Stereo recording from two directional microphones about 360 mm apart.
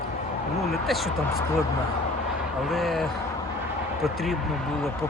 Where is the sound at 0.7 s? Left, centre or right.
Centre.